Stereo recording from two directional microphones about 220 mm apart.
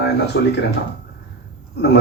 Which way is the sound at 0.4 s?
55° left (ahead or behind).